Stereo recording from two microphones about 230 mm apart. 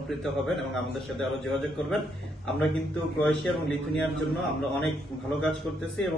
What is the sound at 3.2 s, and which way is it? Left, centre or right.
A man's voice, centre.